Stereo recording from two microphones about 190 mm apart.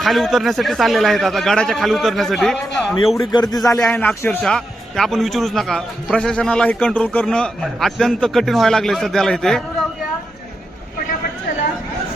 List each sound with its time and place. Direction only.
0.0 s a man's voice: centre (ahead or behind)
3.3 s a man's voice: 20° left (ahead or behind); by 9.6 s centre (ahead or behind)